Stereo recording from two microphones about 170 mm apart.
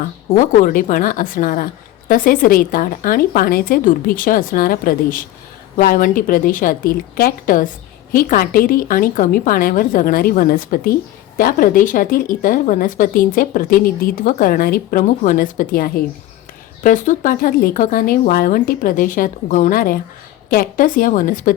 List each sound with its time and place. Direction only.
0.3 s a woman's voice: 55° left (ahead or behind)